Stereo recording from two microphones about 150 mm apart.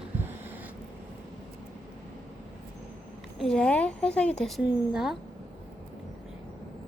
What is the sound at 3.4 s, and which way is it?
A woman's voice, 5° left (ahead or behind).